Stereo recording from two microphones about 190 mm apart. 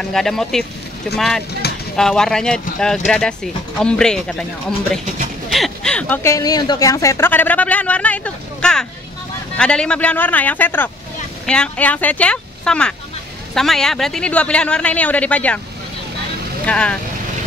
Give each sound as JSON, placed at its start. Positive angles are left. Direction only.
{"t": 0.1, "sound": "speech", "side_deg": 0}
{"t": 1.6, "sound": "a sound", "side_deg": 55}
{"t": 2.0, "sound": "a woman's voice", "side_deg": 0}
{"t": 16.6, "sound": "speech", "side_deg": 5}